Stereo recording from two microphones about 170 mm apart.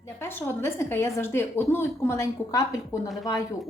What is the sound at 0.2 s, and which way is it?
A woman's voice, 15° left (ahead or behind).